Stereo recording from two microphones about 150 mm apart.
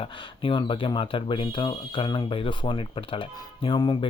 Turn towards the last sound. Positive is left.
turn(degrees=30)  # may be behind; listen again after turning